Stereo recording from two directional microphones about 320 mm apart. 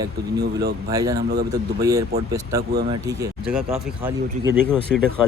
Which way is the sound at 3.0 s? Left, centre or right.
Centre.